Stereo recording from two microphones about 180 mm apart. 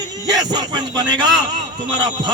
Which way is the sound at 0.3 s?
20° right (ahead or behind).